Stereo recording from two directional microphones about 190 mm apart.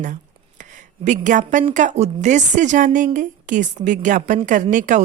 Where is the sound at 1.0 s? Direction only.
40° right (ahead or behind).